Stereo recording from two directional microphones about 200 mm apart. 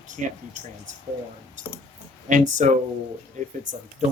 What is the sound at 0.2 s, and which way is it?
Speech, 40° right (ahead or behind).